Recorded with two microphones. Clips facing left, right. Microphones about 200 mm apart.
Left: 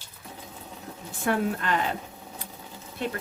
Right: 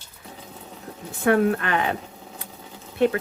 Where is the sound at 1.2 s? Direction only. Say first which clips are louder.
Right 7 dB; 60° right (ahead or behind).